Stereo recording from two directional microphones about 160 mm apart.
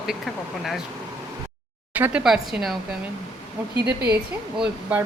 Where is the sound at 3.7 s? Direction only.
90° right.